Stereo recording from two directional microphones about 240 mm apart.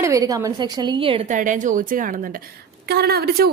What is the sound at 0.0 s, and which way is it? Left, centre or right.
A woman's voice, centre.